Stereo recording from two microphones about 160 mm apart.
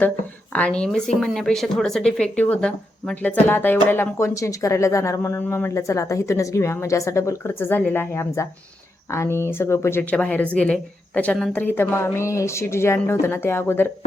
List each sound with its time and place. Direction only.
0.8 s speech: 5° left (ahead or behind)